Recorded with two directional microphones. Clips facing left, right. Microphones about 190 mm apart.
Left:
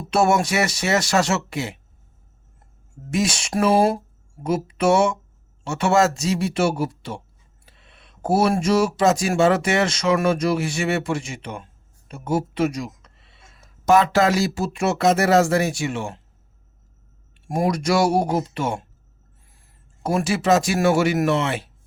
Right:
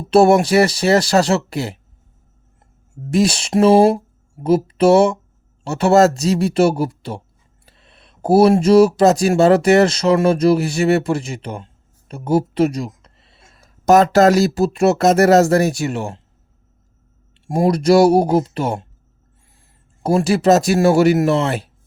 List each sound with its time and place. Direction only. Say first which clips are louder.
0.1 s speech: right 8 dB; 30° right (ahead or behind)
3.1 s speech: right 6 dB; 35° right (ahead or behind)
17.3 s speech: right 5 dB; 25° right (ahead or behind)
20.0 s speech: right 6 dB; 30° right (ahead or behind)